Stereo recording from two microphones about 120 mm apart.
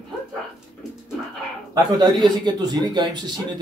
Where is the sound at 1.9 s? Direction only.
40° right (ahead or behind).